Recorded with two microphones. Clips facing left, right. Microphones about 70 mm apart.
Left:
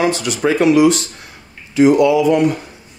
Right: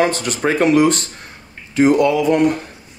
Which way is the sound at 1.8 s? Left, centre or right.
Right.